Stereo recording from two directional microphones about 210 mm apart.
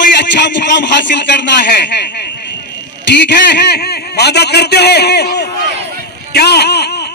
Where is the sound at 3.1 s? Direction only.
55° left (ahead or behind).